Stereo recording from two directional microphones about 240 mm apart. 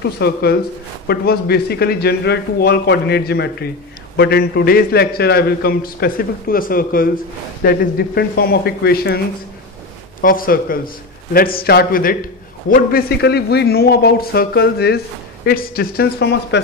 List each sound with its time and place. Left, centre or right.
0.2 s a man's voice: left
10.2 s a man's voice: left